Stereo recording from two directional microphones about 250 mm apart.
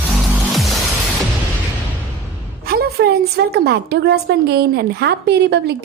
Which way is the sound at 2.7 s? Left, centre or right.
Right.